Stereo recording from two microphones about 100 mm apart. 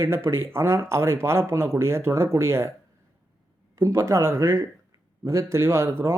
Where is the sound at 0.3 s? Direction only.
25° right (ahead or behind).